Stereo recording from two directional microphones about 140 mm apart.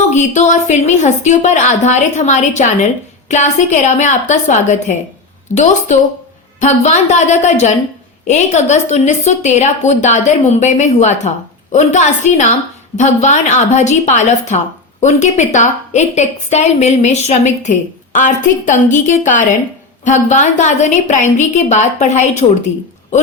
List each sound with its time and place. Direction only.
0.1 s a woman's voice: 55° left (ahead or behind)
6.6 s a woman's voice: 60° left (ahead or behind)